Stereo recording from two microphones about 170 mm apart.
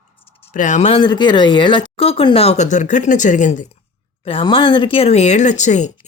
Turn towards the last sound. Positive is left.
turn(degrees=45)  # may be behind; listen again after turning